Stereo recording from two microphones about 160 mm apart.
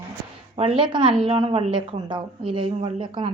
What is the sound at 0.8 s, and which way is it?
A woman's voice, 30° right (ahead or behind).